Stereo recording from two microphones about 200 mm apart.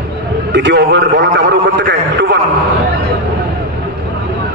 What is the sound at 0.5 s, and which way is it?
A man's voice, 60° right (ahead or behind).